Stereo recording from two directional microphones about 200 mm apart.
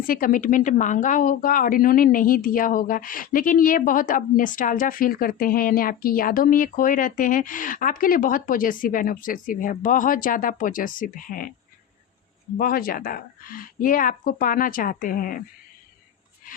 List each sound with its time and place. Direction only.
0.1 s speech: 45° left (ahead or behind)
12.5 s speech: 45° left (ahead or behind)